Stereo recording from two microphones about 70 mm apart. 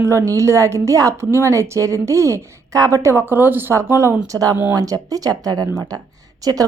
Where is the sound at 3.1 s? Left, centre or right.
Right.